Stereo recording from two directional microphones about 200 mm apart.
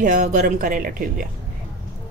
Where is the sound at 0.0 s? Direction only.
45° right (ahead or behind).